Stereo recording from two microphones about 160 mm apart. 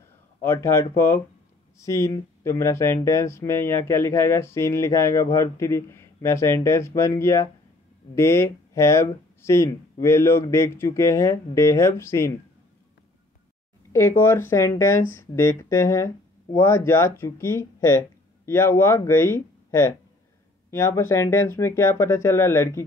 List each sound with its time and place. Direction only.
0.4 s speech: 15° left (ahead or behind)
13.9 s speech: 15° left (ahead or behind)